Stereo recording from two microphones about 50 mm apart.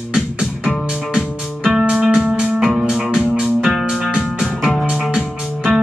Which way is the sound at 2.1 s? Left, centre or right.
Centre.